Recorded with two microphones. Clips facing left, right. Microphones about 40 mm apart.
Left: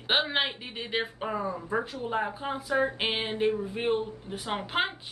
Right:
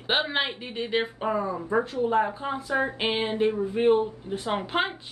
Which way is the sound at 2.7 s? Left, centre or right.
Right.